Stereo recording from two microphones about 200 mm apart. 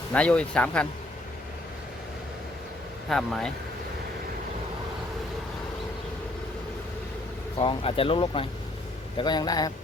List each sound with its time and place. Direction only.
0.1 s speech: 5° left (ahead or behind)
3.1 s speech: centre (ahead or behind)
7.5 s speech: 25° left (ahead or behind)